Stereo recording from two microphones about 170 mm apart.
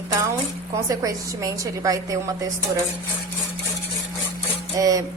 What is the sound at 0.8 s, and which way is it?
A woman's voice, 20° right (ahead or behind).